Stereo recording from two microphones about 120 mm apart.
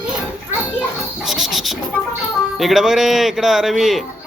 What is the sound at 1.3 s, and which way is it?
Speech, centre (ahead or behind).